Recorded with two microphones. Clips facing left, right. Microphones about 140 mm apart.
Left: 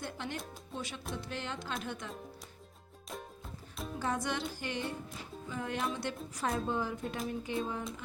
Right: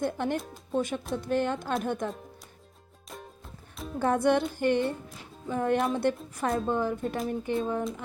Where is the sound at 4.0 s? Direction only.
55° right (ahead or behind).